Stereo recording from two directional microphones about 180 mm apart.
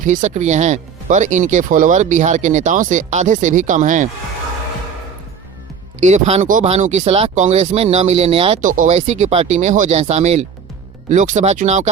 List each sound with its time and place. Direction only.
0.0 s speech: 45° right (ahead or behind)
6.0 s speech: 40° right (ahead or behind)
8.6 s speech: 45° right (ahead or behind)